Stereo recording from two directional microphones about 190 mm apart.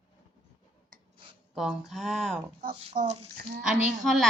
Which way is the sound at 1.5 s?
Centre (ahead or behind).